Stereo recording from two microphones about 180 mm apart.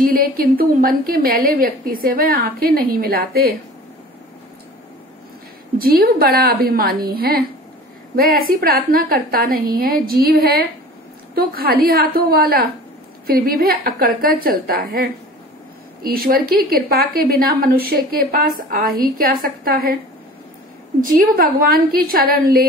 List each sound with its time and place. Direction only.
0.0 s a woman's voice: 55° right (ahead or behind)
5.8 s a woman's voice: 55° right (ahead or behind)
21.0 s a woman's voice: 55° right (ahead or behind)